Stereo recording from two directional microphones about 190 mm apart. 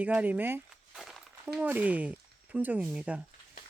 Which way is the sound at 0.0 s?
10° right (ahead or behind).